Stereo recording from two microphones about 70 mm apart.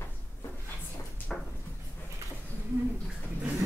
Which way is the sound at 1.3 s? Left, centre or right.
Centre.